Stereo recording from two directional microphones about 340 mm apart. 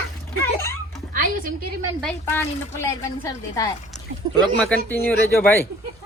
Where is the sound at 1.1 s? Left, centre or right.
Right.